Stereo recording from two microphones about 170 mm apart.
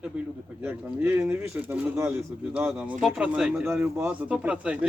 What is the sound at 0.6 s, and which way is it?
Speech, 10° right (ahead or behind).